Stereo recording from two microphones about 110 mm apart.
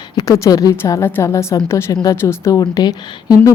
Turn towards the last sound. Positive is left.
turn(degrees=35)  # may be behind; listen again after turning